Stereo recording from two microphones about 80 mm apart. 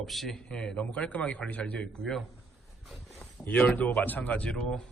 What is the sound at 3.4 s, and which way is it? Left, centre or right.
Speech, left.